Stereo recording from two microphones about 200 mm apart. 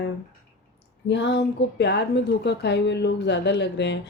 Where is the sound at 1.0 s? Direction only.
60° left (ahead or behind).